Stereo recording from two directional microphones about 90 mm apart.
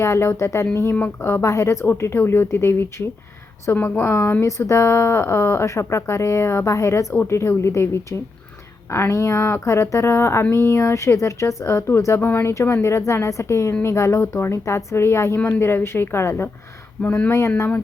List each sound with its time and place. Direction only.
0.0 s speech: 30° left (ahead or behind)
8.9 s speech: 30° left (ahead or behind)